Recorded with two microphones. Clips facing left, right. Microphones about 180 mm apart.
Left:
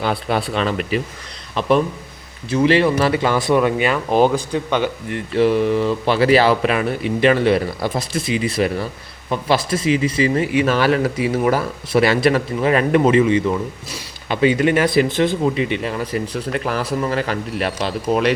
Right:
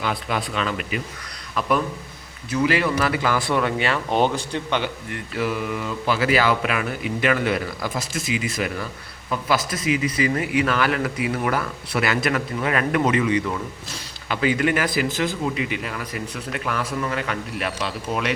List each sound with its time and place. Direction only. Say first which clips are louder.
0.0 s a man's voice: left 5 dB; 30° left (ahead or behind); by 4.6 s 10° left (ahead or behind)
5.1 s speech: left 11 dB; 30° left (ahead or behind)